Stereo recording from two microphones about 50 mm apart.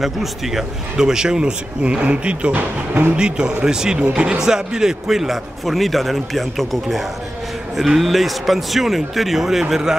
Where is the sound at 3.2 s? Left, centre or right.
Centre.